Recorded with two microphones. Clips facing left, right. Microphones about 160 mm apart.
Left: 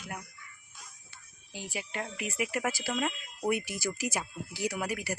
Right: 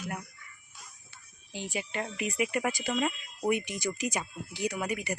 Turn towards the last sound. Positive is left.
turn(degrees=5)  # may be behind; listen again after turning